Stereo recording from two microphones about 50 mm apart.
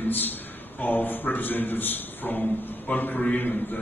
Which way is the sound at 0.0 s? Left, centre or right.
Left.